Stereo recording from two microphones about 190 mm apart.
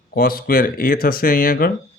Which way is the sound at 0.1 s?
50° left (ahead or behind).